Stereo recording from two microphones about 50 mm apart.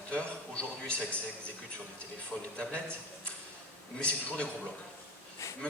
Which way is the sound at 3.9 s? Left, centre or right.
Left.